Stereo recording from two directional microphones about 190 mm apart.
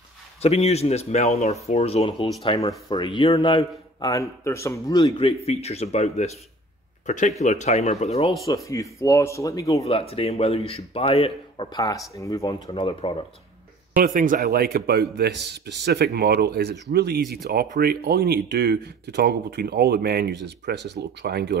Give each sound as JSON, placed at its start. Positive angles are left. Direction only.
{"t": 0.4, "sound": "a man's voice", "side_deg": 35}
{"t": 8.6, "sound": "a man's voice", "side_deg": 15}
{"t": 9.8, "sound": "a man's voice", "side_deg": 30}
{"t": 13.9, "sound": "speech", "side_deg": -45}